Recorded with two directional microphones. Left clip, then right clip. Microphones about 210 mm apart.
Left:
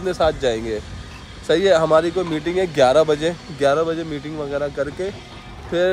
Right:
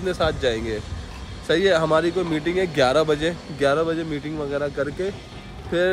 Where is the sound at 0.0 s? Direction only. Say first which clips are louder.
Left 3 dB; centre (ahead or behind).